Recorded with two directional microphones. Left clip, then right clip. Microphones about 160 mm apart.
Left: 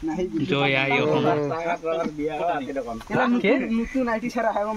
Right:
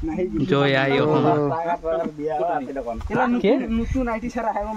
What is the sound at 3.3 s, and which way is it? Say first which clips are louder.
Speech: right 2 dB; 35° right (ahead or behind).